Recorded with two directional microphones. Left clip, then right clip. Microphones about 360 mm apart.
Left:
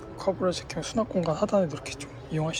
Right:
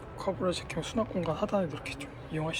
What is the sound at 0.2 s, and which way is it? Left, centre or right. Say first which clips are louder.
Speech: left 4 dB; centre.